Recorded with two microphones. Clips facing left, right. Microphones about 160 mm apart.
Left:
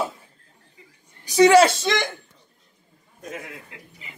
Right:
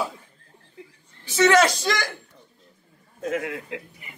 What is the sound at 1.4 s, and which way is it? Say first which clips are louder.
Speech: left 4 dB; 30° left (ahead or behind).